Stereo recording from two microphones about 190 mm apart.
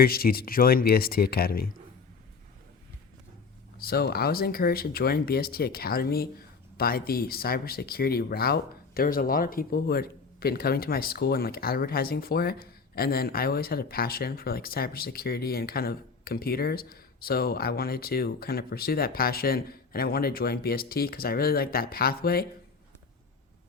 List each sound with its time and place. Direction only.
0.0 s speech: 50° left (ahead or behind)
3.8 s speech: 55° left (ahead or behind)